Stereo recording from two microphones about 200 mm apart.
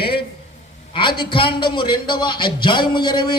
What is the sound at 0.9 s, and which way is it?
A man's voice, 25° left (ahead or behind).